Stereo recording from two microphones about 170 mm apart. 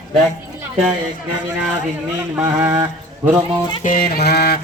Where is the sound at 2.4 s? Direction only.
15° right (ahead or behind).